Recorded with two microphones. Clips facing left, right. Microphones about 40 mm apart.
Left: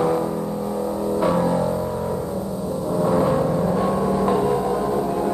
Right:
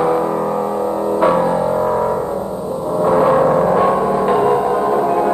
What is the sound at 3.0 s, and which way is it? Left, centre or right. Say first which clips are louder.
Gong: right 7 dB; right.